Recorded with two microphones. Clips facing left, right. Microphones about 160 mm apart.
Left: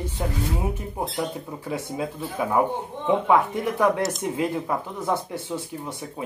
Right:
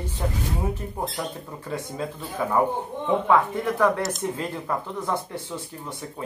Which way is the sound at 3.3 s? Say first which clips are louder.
Right 1 dB; 15° left (ahead or behind).